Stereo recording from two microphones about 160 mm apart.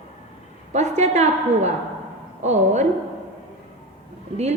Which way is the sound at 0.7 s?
45° right (ahead or behind).